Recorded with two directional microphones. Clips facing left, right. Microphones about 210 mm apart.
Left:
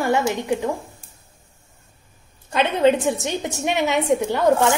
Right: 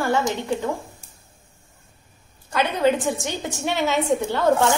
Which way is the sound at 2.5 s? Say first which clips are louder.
Left 3 dB; 20° left (ahead or behind).